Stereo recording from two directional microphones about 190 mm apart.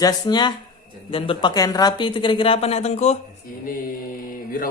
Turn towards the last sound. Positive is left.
turn(degrees=45)  # may be behind; listen again after turning